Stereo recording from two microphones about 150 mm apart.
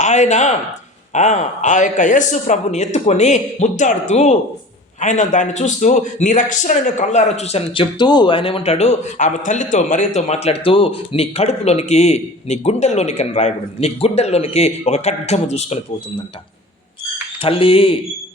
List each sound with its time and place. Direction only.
0.0 s a man's voice: 50° left (ahead or behind)
17.4 s speech: 40° left (ahead or behind)